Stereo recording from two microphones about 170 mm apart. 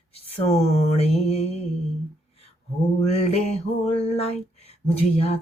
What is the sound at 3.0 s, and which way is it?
Speech, 40° left (ahead or behind).